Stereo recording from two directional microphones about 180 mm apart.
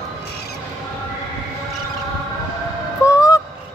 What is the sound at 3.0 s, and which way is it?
Honk, 20° left (ahead or behind).